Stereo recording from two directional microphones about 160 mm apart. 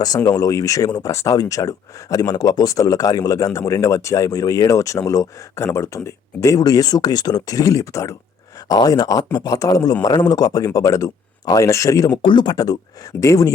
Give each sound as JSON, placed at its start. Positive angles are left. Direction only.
{"t": 0.2, "sound": "speech", "side_deg": 20}